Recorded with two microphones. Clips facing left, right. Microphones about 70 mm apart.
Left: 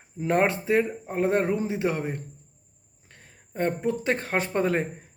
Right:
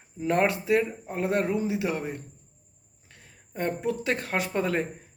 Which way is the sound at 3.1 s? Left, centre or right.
Left.